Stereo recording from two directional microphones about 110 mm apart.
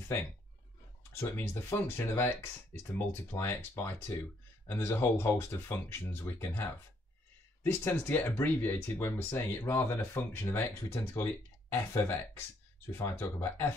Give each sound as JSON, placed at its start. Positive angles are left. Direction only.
{"t": 1.2, "sound": "speech", "side_deg": 20}